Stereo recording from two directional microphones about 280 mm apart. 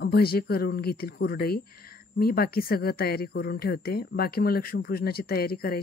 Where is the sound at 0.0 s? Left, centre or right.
Left.